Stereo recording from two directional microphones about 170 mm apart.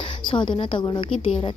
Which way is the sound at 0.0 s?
30° left (ahead or behind).